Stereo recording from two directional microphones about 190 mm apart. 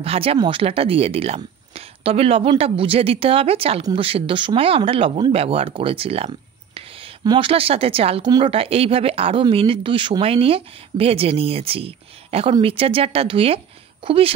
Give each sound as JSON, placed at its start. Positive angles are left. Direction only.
{"t": 0.0, "sound": "speech", "side_deg": -30}